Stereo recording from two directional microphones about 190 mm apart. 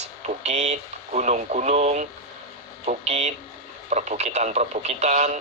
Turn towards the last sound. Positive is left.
turn(degrees=-35)  # may be behind; listen again after turning